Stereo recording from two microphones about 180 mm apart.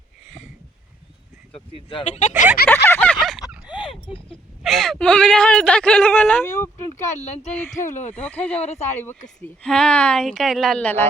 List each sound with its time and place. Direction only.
1.9 s speech: 35° left (ahead or behind)
2.6 s a sound: 10° left (ahead or behind)
3.8 s a sound: 30° left (ahead or behind)
4.6 s speech: centre (ahead or behind)
6.9 s speech: 40° left (ahead or behind)
8.1 s speech: 10° left (ahead or behind)
8.5 s speech: 35° left (ahead or behind)
9.0 s speech: 5° left (ahead or behind)